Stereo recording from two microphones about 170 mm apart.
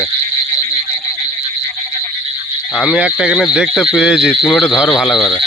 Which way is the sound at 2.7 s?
5° right (ahead or behind).